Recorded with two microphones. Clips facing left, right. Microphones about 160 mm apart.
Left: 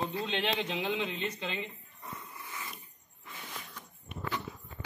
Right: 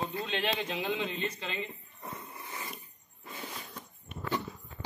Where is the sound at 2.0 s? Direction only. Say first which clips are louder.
Right 2 dB; 40° right (ahead or behind).